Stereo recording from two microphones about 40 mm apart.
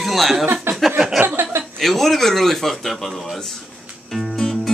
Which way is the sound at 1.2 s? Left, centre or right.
Right.